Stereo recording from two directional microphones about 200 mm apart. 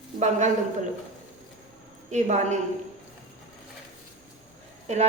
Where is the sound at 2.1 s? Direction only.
35° right (ahead or behind).